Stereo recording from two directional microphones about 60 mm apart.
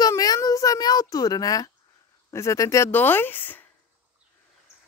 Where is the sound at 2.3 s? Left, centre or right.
Left.